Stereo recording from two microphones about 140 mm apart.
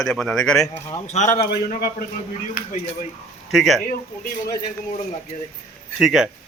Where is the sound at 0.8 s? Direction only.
20° left (ahead or behind).